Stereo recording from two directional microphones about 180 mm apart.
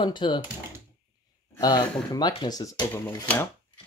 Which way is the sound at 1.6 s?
25° left (ahead or behind).